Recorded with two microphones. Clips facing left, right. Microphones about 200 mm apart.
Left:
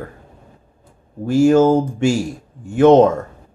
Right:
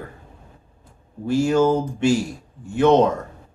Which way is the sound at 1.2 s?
45° left (ahead or behind).